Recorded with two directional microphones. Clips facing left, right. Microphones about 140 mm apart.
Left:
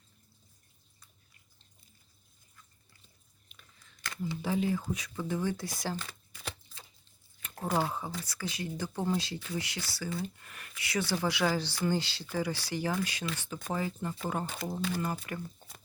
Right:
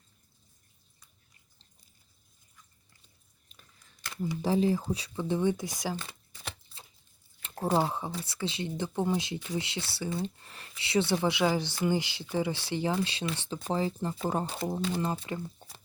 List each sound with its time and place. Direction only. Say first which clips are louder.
4.4 s speech: right 4 dB; 30° right (ahead or behind)
7.4 s speech: right 4 dB; 30° right (ahead or behind)